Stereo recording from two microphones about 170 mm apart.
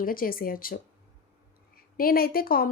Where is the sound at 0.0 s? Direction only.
55° left (ahead or behind).